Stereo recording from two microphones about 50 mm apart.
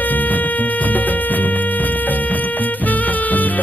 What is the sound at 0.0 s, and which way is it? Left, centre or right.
Music, left.